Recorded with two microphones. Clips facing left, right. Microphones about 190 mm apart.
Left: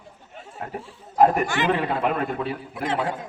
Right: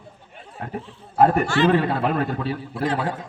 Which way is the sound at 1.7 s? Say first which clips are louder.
Right 3 dB; 35° right (ahead or behind).